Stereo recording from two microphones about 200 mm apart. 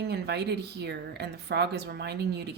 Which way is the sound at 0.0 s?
55° right (ahead or behind).